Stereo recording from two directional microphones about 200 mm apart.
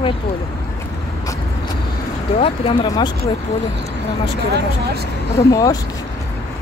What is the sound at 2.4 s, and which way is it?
Speech, 25° left (ahead or behind).